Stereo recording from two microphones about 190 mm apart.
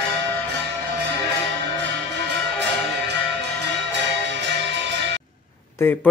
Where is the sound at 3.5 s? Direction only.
70° right (ahead or behind).